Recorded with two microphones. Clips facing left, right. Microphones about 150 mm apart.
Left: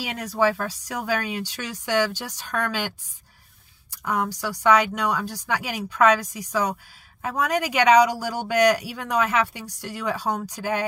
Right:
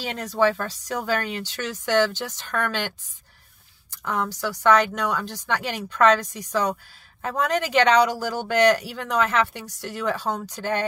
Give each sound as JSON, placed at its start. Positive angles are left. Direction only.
{"t": 0.0, "sound": "speech", "side_deg": 10}
{"t": 3.9, "sound": "speech", "side_deg": 10}